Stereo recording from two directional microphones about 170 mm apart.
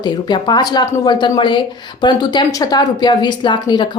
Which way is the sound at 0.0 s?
25° left (ahead or behind).